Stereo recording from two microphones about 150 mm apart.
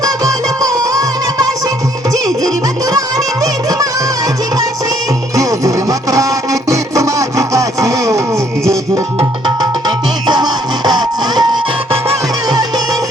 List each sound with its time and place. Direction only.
0.0 s music: 20° right (ahead or behind)
5.4 s music: 20° right (ahead or behind)